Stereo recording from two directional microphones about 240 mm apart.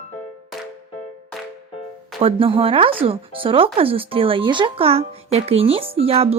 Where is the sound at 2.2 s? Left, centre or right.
Right.